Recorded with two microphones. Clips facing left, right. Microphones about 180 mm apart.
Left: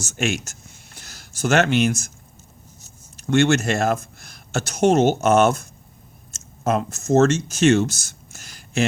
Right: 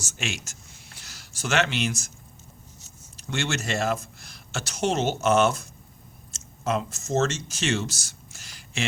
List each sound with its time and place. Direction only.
0.0 s speech: 50° left (ahead or behind)
3.2 s speech: 50° left (ahead or behind)